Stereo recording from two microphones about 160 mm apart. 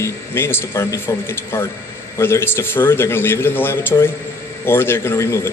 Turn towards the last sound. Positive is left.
turn(degrees=15)  # may be behind; listen again after turning